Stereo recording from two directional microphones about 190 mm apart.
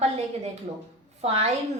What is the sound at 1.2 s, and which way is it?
Speech, 35° right (ahead or behind).